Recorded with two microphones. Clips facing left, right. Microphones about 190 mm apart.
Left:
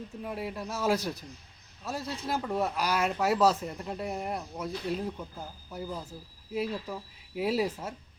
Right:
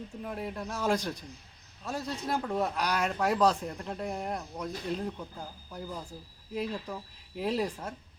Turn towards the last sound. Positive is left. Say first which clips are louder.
# left 2 dB
turn(degrees=5)  # may be behind; listen again after turning